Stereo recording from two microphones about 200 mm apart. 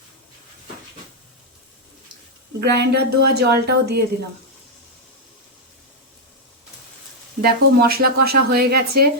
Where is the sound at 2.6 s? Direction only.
55° right (ahead or behind).